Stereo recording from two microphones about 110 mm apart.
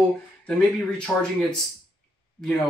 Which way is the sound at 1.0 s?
5° left (ahead or behind).